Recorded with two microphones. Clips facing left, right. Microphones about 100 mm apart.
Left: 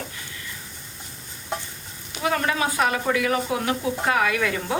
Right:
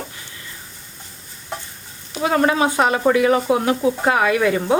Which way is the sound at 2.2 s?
30° right (ahead or behind).